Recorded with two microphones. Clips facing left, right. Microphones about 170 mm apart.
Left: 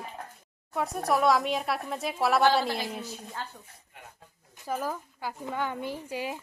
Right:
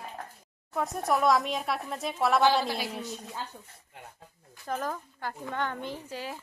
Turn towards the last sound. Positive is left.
turn(degrees=15)  # may be behind; listen again after turning